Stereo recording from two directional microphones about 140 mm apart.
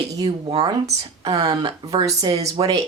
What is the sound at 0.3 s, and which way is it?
Speech, 45° right (ahead or behind).